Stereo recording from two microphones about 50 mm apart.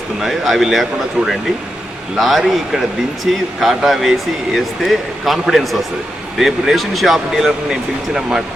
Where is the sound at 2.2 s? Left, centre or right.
Centre.